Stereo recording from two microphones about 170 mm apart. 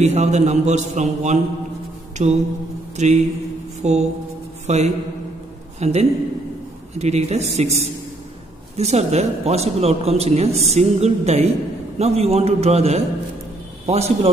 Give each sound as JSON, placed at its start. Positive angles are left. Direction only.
{"t": 0.0, "sound": "a man's voice", "side_deg": -40}